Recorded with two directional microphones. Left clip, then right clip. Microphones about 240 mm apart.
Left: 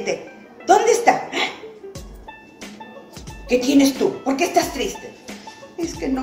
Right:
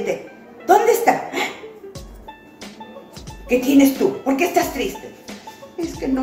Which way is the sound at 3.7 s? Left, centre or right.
Centre.